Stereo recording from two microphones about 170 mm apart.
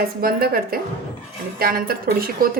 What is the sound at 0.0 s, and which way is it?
A woman's voice, 60° right (ahead or behind).